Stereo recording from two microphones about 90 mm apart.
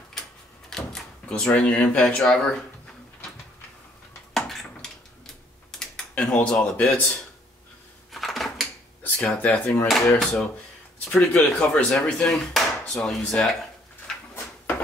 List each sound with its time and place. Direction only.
0.7 s door: 5° left (ahead or behind)
1.3 s speech: 10° left (ahead or behind)
4.3 s a sound: 5° left (ahead or behind)
6.6 s speech: 10° left (ahead or behind)
8.1 s dishes: centre (ahead or behind)
9.0 s speech: 15° left (ahead or behind)
9.8 s speech: 5° left (ahead or behind)
11.3 s speech: 10° left (ahead or behind)